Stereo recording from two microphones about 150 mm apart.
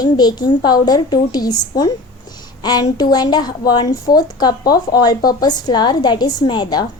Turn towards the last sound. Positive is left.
turn(degrees=30)  # may be behind; listen again after turning